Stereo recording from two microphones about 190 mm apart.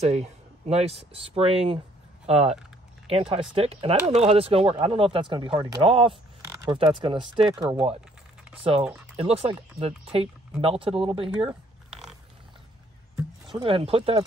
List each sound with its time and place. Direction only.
0.0 s speech: 35° right (ahead or behind)
9.1 s speech: 30° right (ahead or behind)
11.4 s a sound: centre (ahead or behind)
13.1 s speech: 25° right (ahead or behind)